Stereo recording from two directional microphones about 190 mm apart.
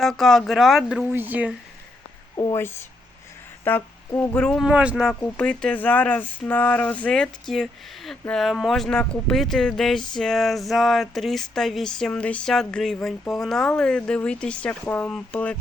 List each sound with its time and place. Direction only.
0.0 s speech: centre (ahead or behind)
2.3 s a woman's voice: 20° left (ahead or behind); by 5.1 s 5° right (ahead or behind)
5.2 s speech: 5° left (ahead or behind)